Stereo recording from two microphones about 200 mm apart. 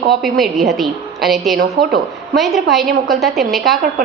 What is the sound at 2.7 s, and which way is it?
Speech, centre (ahead or behind).